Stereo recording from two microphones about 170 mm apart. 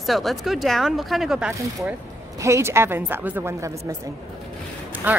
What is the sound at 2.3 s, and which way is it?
A woman's voice, 15° right (ahead or behind).